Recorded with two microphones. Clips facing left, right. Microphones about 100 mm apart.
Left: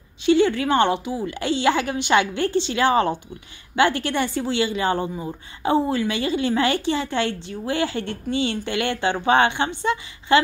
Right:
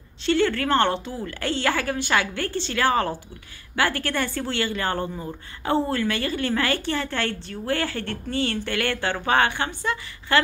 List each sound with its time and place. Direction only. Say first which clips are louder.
0.2 s a woman's voice: left 4 dB; 15° left (ahead or behind)